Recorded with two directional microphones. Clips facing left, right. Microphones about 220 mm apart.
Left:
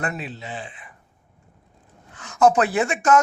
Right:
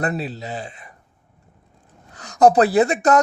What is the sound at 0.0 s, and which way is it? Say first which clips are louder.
Speech: right 5 dB; 35° right (ahead or behind).